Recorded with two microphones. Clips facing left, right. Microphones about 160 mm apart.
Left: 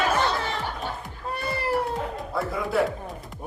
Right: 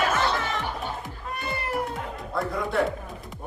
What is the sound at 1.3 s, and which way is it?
Music, 30° left (ahead or behind).